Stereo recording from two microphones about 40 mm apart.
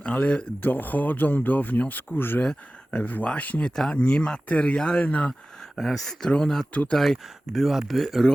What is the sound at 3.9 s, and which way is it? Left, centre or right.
Speech, left.